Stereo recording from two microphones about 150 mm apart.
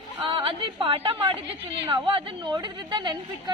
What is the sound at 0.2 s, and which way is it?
A woman's voice, 35° right (ahead or behind).